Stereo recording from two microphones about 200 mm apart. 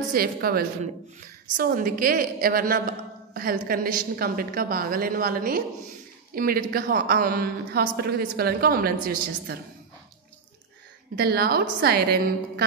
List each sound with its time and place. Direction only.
0.1 s a woman's voice: 50° right (ahead or behind)
11.1 s a woman's voice: 50° right (ahead or behind)